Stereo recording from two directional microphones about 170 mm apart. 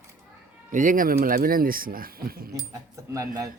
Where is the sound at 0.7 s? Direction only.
50° right (ahead or behind).